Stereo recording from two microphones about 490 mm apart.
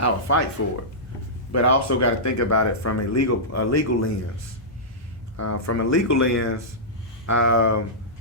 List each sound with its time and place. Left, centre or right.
0.0 s speech: left
1.5 s speech: left
5.4 s speech: left